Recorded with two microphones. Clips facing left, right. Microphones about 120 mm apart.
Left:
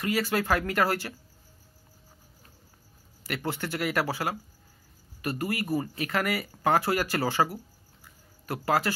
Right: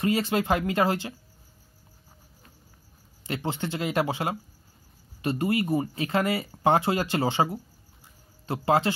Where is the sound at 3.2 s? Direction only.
20° right (ahead or behind).